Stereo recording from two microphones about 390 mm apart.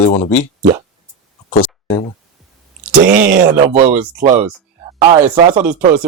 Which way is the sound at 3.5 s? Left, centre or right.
Centre.